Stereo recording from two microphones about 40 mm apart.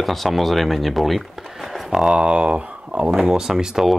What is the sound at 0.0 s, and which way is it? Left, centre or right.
Speech, centre.